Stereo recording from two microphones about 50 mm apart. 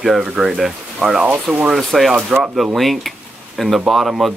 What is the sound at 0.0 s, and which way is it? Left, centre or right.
Speech, centre.